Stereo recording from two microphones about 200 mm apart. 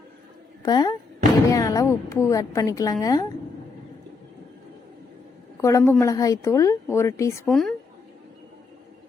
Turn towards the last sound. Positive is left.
turn(degrees=0)  # may be behind; listen again after turning